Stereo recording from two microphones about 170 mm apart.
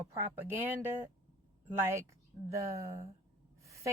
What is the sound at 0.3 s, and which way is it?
Speech, 15° right (ahead or behind).